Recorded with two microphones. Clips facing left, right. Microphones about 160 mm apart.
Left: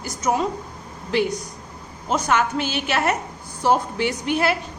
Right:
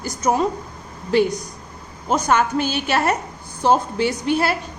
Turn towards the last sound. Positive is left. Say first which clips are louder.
# right 2 dB
turn(degrees=-35)  # may be behind; listen again after turning